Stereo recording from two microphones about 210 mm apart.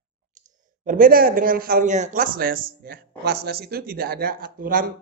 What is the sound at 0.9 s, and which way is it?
Speech, 40° right (ahead or behind).